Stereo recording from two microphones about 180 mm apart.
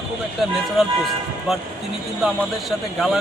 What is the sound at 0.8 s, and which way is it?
A man's voice, centre (ahead or behind).